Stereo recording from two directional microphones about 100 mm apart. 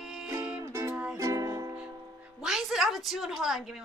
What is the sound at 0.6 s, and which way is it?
Music, 30° right (ahead or behind).